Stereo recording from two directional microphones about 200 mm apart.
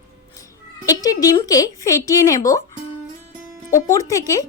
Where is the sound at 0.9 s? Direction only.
20° left (ahead or behind).